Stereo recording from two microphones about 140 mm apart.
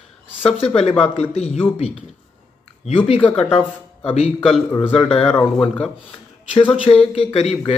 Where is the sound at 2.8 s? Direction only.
45° left (ahead or behind).